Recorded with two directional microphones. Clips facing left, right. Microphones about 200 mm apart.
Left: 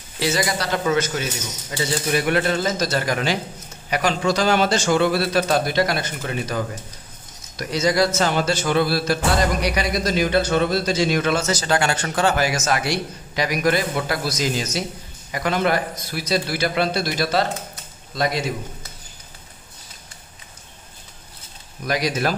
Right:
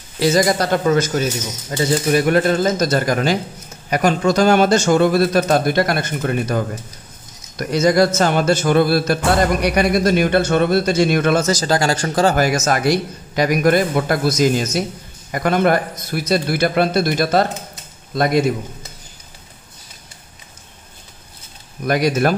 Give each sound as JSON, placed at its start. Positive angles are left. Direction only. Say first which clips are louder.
{"t": 0.2, "sound": "speech", "louder": "right 7 dB", "side_deg": -45}
{"t": 11.6, "sound": "a man's voice", "louder": "right 4 dB", "side_deg": -35}
{"t": 21.8, "sound": "speech", "louder": "right 6 dB", "side_deg": -55}